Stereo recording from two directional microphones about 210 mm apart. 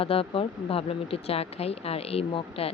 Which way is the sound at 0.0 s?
25° left (ahead or behind).